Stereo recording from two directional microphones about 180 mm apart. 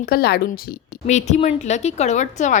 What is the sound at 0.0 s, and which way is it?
Speech, 55° left (ahead or behind).